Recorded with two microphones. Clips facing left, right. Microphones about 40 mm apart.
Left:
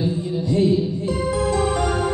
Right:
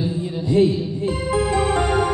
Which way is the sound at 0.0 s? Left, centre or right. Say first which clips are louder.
Left 1 dB; centre.